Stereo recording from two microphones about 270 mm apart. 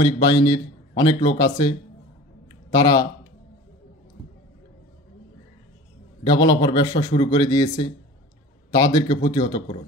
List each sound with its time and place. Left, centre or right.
0.0 s a man's voice: centre
6.2 s a man's voice: centre